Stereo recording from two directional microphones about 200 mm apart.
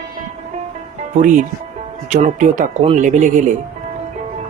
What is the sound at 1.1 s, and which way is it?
Speech, 40° right (ahead or behind).